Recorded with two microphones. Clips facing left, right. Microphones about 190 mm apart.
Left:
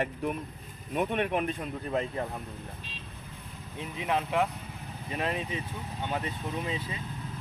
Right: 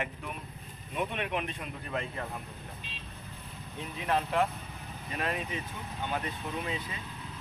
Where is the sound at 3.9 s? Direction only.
15° left (ahead or behind).